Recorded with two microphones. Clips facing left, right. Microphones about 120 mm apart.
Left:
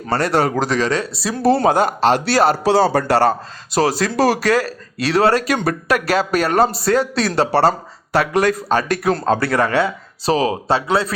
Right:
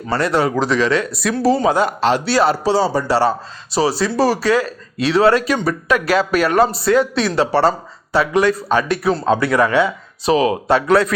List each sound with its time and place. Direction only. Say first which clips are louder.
0.1 s speech: even; 40° left (ahead or behind)
1.4 s speech: left 1 dB; 55° left (ahead or behind)
4.3 s a man's voice: even; 40° left (ahead or behind)